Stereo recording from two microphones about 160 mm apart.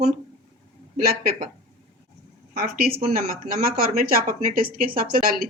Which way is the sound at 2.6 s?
70° right (ahead or behind).